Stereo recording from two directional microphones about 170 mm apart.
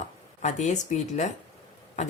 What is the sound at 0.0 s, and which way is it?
Speech, 45° left (ahead or behind).